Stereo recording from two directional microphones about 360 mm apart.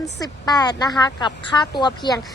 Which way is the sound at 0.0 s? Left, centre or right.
Centre.